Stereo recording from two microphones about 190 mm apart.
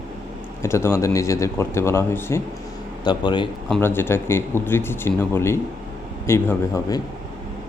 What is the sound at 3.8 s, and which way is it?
Speech, 10° left (ahead or behind).